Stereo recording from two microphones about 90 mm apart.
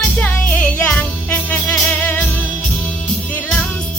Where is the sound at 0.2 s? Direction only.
20° left (ahead or behind).